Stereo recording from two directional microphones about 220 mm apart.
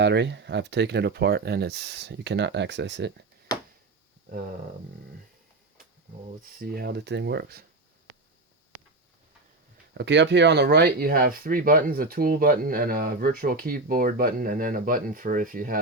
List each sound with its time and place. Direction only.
0.0 s speech: 50° right (ahead or behind)
6.6 s speech: 45° right (ahead or behind)
10.0 s speech: 50° right (ahead or behind)